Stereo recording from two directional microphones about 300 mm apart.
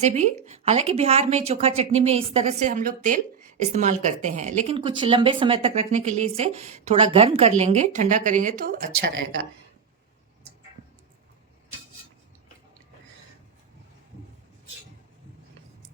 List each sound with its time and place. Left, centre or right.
0.0 s a woman's voice: right